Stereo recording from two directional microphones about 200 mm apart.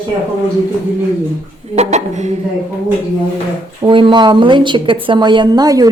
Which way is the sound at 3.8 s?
25° right (ahead or behind).